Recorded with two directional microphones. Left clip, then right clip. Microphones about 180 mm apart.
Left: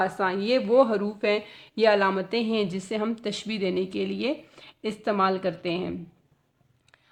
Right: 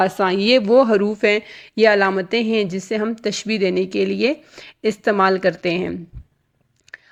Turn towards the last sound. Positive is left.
turn(degrees=-30)  # may be behind; listen again after turning